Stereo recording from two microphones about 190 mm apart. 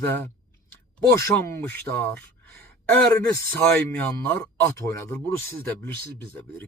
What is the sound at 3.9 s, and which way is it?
Speech, 15° left (ahead or behind).